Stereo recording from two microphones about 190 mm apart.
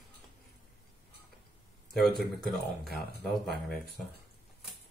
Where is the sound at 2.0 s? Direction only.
Centre (ahead or behind).